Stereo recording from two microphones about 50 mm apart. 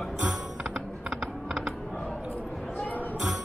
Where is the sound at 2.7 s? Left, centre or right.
Left.